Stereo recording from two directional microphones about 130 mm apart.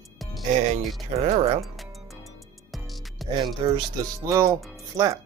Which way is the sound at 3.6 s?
35° right (ahead or behind).